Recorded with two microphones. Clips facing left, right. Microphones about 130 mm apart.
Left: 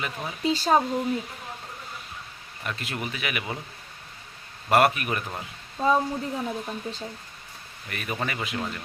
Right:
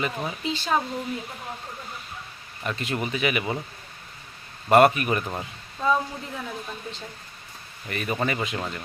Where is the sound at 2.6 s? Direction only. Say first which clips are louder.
Right 4 dB; centre (ahead or behind).